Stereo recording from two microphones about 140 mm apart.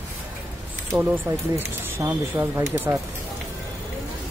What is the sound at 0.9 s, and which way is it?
Speech, 15° right (ahead or behind).